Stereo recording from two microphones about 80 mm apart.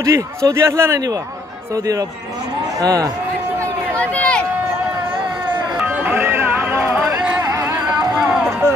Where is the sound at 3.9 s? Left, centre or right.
Centre.